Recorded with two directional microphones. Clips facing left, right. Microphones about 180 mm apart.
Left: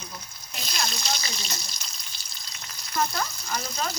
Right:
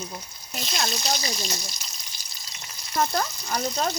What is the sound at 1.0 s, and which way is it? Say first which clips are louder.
Speech: right 4 dB; 35° right (ahead or behind).